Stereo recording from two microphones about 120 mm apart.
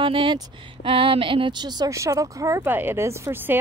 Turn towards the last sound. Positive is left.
turn(degrees=-20)  # may be behind; listen again after turning